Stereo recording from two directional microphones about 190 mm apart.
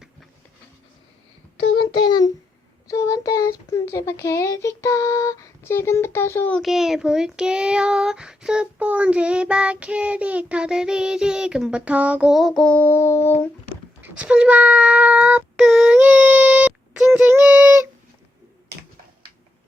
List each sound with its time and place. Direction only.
1.8 s a sound: 20° left (ahead or behind)
2.9 s child singing: 15° left (ahead or behind)
14.0 s child singing: 5° right (ahead or behind)